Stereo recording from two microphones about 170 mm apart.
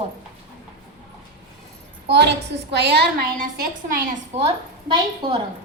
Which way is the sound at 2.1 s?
90° right.